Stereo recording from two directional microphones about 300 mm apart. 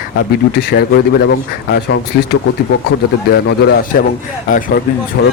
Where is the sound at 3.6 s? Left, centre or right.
Left.